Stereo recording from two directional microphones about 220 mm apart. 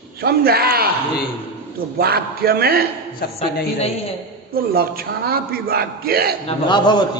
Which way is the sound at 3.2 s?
45° left (ahead or behind).